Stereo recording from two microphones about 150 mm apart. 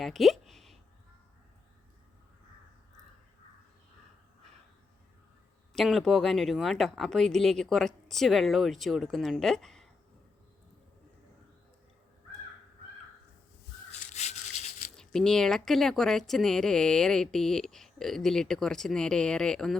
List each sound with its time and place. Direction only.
0.0 s a sound: centre (ahead or behind)
5.7 s speech: centre (ahead or behind)
14.1 s sawing: 50° left (ahead or behind)
14.9 s speech: 5° left (ahead or behind)